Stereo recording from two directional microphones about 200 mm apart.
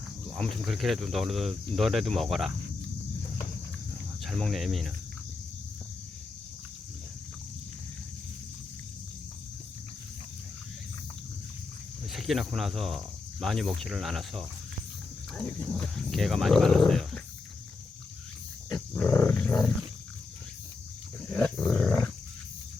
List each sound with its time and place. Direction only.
0.3 s speech: centre (ahead or behind)
4.2 s speech: centre (ahead or behind)
12.1 s speech: centre (ahead or behind)
16.1 s speech: centre (ahead or behind)
18.7 s wild animals: 10° left (ahead or behind)
21.3 s dog: 5° left (ahead or behind)